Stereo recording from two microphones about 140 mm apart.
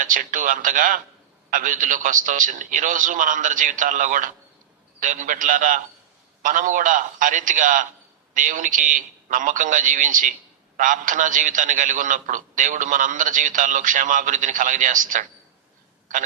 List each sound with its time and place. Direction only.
0.0 s a man's voice: 75° right (ahead or behind)